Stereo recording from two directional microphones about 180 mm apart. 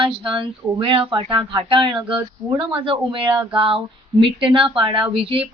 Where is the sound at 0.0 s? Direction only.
30° right (ahead or behind).